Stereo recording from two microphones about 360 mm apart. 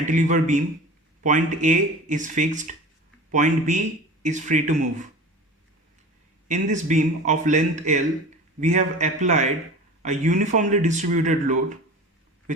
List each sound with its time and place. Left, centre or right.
0.0 s a man's voice: right
6.5 s a man's voice: centre